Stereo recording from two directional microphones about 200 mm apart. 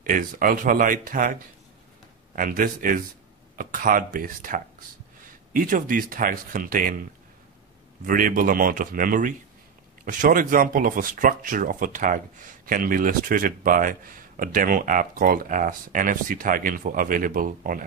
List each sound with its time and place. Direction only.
0.0 s speech: 45° right (ahead or behind)
2.3 s speech: 45° right (ahead or behind)
8.1 s speech: 45° right (ahead or behind)